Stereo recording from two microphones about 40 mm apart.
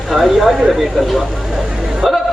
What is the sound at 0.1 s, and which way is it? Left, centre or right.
Speech, centre.